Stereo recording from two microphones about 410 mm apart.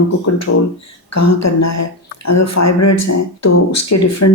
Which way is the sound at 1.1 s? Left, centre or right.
Left.